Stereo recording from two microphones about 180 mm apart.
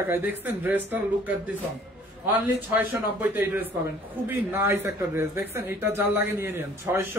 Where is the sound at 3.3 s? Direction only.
10° right (ahead or behind).